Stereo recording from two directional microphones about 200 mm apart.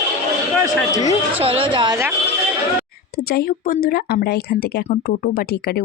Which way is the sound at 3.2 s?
50° left (ahead or behind).